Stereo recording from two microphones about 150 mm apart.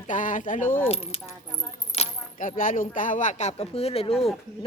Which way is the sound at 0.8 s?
40° left (ahead or behind).